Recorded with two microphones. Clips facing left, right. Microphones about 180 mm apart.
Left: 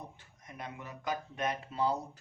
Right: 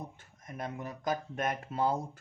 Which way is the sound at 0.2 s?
45° right (ahead or behind).